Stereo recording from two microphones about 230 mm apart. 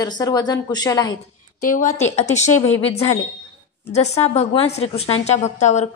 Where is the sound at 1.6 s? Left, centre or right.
Left.